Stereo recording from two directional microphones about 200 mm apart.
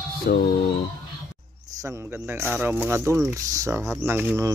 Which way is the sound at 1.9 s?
10° right (ahead or behind).